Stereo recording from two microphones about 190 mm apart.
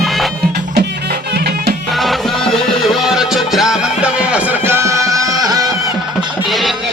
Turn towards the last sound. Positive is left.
turn(degrees=0)  # may be behind; listen again after turning